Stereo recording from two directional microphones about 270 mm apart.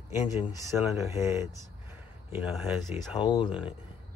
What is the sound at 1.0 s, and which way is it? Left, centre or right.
Speech, centre.